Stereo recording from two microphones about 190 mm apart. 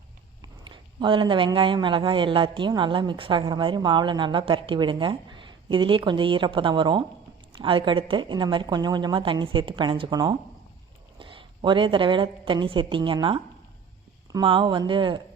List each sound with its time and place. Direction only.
0.4 s a man's voice: 25° right (ahead or behind)